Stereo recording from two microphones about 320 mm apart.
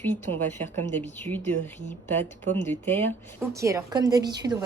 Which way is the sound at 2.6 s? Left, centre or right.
Centre.